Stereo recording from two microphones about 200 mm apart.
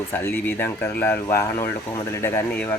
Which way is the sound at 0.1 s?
10° left (ahead or behind).